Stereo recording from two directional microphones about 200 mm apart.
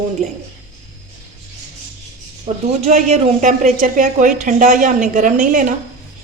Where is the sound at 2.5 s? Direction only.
30° right (ahead or behind).